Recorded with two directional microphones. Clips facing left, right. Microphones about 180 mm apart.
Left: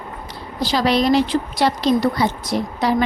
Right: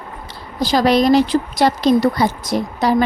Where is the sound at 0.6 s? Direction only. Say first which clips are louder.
Right 4 dB; 45° right (ahead or behind).